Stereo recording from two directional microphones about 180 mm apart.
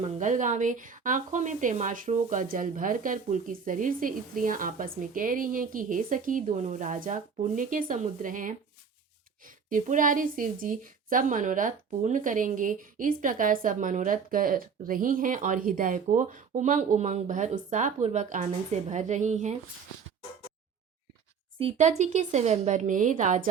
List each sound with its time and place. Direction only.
0.0 s speech: 45° right (ahead or behind)
21.6 s speech: 40° right (ahead or behind)